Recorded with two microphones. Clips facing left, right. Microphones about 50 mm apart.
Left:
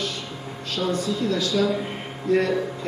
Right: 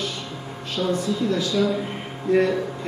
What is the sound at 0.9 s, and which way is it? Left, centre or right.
Speech, centre.